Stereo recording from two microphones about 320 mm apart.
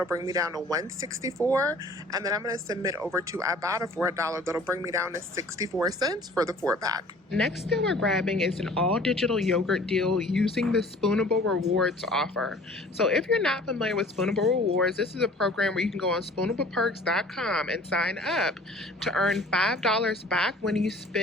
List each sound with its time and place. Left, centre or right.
0.0 s speech: centre
7.3 s speech: centre
11.3 s speech: right
11.8 s speech: centre